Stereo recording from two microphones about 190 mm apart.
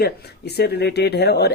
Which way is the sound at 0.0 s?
55° left (ahead or behind).